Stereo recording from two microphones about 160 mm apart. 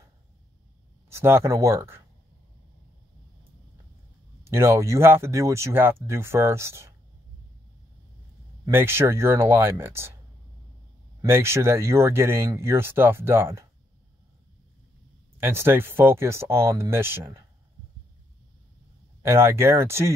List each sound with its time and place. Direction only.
1.0 s speech: 15° right (ahead or behind)
4.5 s speech: 15° right (ahead or behind)
8.6 s speech: 15° right (ahead or behind)
11.2 s speech: 15° right (ahead or behind)
15.4 s speech: 15° right (ahead or behind)
19.2 s speech: 15° right (ahead or behind)